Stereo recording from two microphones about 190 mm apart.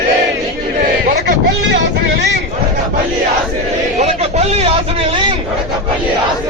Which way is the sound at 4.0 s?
35° right (ahead or behind).